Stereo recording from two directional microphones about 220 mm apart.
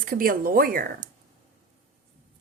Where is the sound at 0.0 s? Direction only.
40° right (ahead or behind).